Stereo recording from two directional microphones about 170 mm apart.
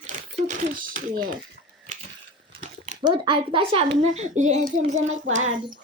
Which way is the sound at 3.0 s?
30° right (ahead or behind).